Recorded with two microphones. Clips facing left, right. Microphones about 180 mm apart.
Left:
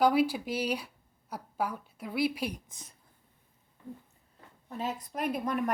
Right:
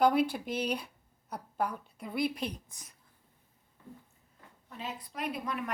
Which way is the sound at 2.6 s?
25° left (ahead or behind).